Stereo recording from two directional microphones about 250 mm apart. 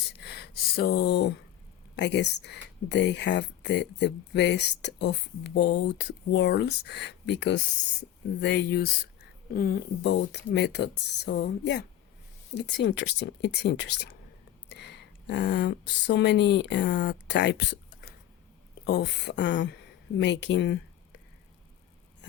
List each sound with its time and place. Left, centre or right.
0.2 s gasp: left
2.0 s speech: left